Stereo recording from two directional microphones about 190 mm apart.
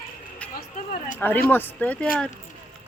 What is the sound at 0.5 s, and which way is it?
Speech, 50° left (ahead or behind).